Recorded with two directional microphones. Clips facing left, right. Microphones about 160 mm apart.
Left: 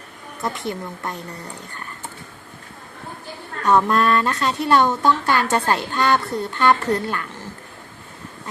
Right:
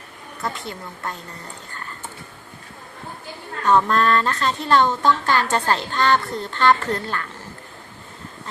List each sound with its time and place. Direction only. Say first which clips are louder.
0.4 s speech: left 4 dB; 15° left (ahead or behind)
3.6 s speech: left 1 dB; 10° left (ahead or behind)